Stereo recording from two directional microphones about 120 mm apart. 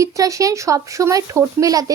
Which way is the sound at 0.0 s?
25° right (ahead or behind).